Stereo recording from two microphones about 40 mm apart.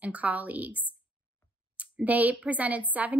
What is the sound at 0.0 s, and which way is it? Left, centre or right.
Speech, right.